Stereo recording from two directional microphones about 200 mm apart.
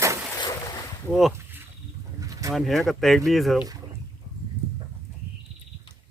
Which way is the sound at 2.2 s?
15° right (ahead or behind).